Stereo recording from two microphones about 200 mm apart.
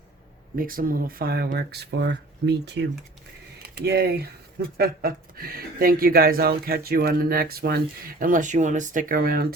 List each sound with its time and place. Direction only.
0.5 s speech: 45° right (ahead or behind)